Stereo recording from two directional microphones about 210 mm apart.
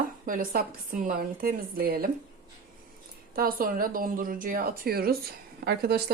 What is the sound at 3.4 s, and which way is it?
A woman's voice, 45° right (ahead or behind).